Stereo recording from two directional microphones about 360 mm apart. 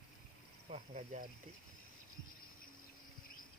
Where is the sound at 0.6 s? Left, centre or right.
Centre.